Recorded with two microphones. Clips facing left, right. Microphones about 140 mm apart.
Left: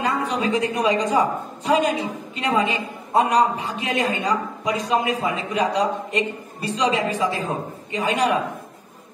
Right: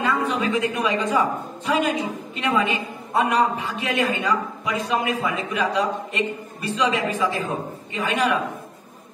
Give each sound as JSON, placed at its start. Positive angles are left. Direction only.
{"t": 0.0, "sound": "a man's voice", "side_deg": 35}